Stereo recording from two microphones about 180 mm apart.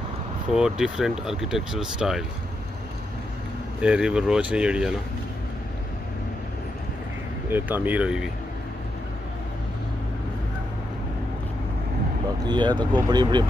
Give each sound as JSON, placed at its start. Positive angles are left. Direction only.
{"t": 0.5, "sound": "speech", "side_deg": -5}
{"t": 3.8, "sound": "speech", "side_deg": -5}
{"t": 7.4, "sound": "speech", "side_deg": -10}
{"t": 12.4, "sound": "speech", "side_deg": -25}